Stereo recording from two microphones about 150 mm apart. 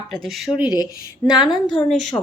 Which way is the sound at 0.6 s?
25° left (ahead or behind).